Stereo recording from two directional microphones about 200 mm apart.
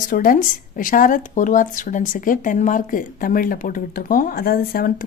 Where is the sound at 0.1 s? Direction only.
45° left (ahead or behind).